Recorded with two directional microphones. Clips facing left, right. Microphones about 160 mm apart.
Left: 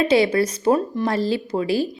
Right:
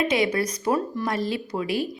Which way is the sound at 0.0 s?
30° left (ahead or behind).